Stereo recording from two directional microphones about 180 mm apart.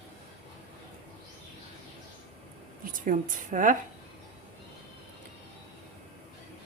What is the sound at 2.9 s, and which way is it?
Speech, 45° right (ahead or behind).